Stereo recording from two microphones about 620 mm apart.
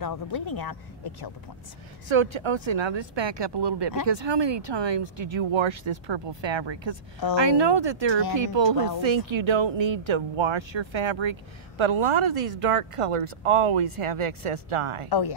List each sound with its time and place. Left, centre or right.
0.0 s speech: left
2.0 s speech: right
15.0 s speech: left